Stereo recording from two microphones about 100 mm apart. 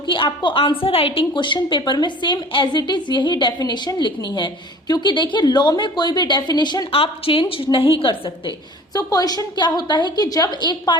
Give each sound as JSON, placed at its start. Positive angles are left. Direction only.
{"t": 0.1, "sound": "a woman's voice", "side_deg": 55}
{"t": 6.9, "sound": "a woman's voice", "side_deg": 65}
{"t": 8.9, "sound": "a woman's voice", "side_deg": 40}